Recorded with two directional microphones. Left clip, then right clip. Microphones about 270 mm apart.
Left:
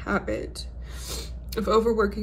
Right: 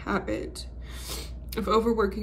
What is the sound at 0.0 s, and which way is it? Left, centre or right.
Speech, centre.